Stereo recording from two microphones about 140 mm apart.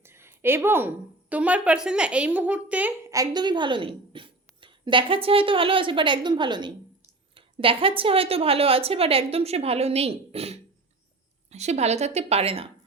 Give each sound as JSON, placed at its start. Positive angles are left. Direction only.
{"t": 0.0, "sound": "a woman's voice", "side_deg": -15}
{"t": 3.1, "sound": "a woman's voice", "side_deg": -25}